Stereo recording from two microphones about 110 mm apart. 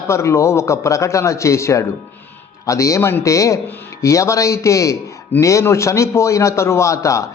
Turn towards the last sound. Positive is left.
turn(degrees=30)  # may be behind; listen again after turning